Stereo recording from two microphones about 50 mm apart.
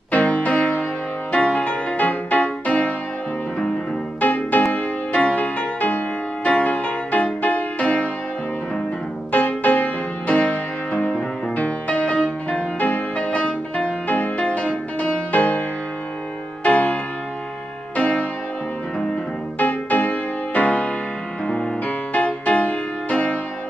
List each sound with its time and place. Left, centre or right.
0.1 s music: left
4.2 s music: left
5.1 s music: left
9.3 s music: left
12.1 s music: left
14.0 s music: left
16.6 s music: left
19.6 s music: left